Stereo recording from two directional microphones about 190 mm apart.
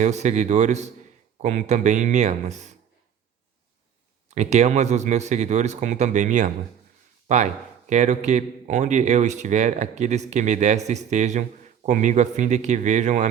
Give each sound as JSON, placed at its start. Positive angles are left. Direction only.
{"t": 0.0, "sound": "a man's voice", "side_deg": -35}
{"t": 4.3, "sound": "a man's voice", "side_deg": -35}